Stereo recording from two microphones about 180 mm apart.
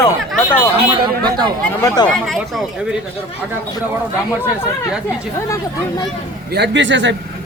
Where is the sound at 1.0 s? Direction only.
25° right (ahead or behind).